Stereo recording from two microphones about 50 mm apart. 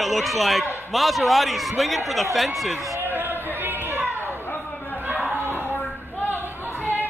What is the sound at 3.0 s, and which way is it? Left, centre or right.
Chatter, right.